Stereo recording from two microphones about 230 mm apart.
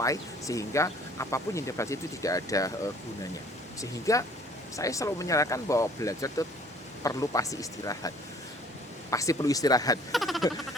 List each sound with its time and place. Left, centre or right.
0.0 s speech: centre
10.1 s speech: centre